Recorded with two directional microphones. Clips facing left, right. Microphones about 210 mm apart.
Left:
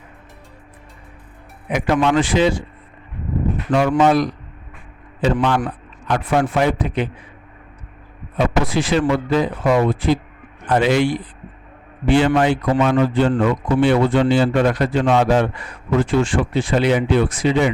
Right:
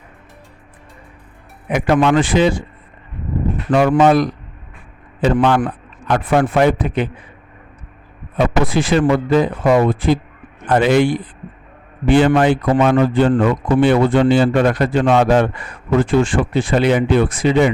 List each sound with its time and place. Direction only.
1.7 s speech: 55° right (ahead or behind)
3.7 s a man's voice: 55° right (ahead or behind)
8.4 s a man's voice: 55° right (ahead or behind)